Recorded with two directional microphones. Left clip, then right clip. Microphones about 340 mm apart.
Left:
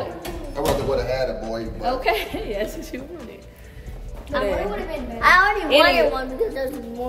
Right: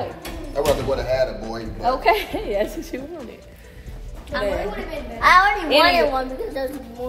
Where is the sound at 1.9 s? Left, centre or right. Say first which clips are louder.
Right 4 dB; centre.